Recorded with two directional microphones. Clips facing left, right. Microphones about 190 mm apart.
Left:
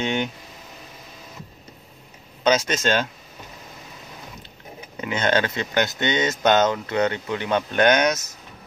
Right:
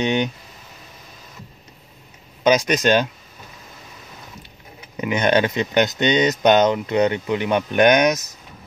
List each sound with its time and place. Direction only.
0.0 s speech: 20° right (ahead or behind)
2.4 s speech: 15° right (ahead or behind)
5.0 s speech: 15° right (ahead or behind)